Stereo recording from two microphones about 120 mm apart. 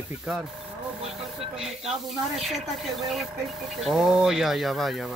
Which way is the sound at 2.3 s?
Centre (ahead or behind).